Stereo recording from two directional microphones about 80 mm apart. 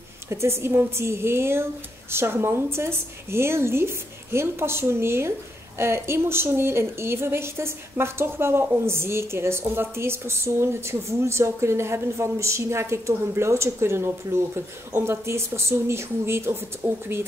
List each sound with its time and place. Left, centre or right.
0.3 s a woman's voice: right